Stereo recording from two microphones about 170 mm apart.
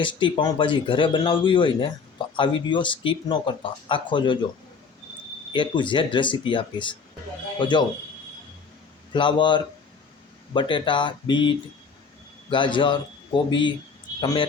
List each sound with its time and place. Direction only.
0.0 s speech: 30° left (ahead or behind)
5.5 s speech: 30° left (ahead or behind)
9.1 s a man's voice: 25° left (ahead or behind)